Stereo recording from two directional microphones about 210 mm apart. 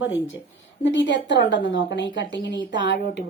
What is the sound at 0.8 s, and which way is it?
A woman's voice, 60° left (ahead or behind).